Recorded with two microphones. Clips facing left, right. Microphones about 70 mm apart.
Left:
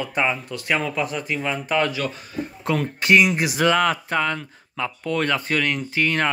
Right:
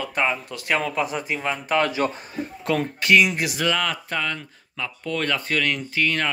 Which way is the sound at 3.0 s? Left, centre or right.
Left.